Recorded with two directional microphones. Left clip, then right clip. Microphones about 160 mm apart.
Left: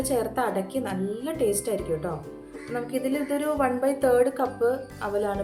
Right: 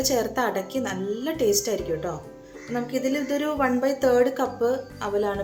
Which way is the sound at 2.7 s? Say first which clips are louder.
Right 2 dB; 20° right (ahead or behind).